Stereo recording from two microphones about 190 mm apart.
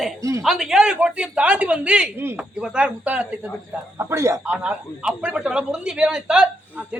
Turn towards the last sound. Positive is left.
turn(degrees=-5)  # may be behind; listen again after turning